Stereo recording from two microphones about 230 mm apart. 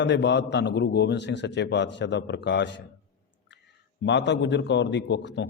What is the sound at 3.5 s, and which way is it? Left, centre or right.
Clicking, left.